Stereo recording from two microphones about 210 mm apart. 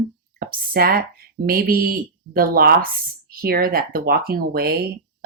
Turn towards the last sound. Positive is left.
turn(degrees=-45)  # may be behind; listen again after turning